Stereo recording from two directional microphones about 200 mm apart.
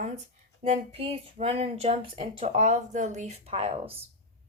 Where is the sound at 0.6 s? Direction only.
30° right (ahead or behind).